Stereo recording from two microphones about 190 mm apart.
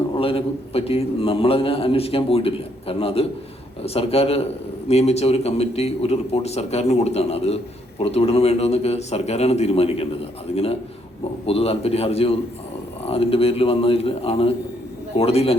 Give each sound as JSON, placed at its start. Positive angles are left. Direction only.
{"t": 0.2, "sound": "a man's voice", "side_deg": 30}